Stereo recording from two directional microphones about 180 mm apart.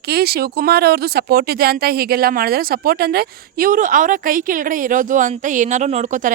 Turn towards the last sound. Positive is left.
turn(degrees=-45)  # may be behind; listen again after turning